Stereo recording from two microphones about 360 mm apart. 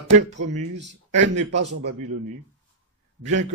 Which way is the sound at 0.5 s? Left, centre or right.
Right.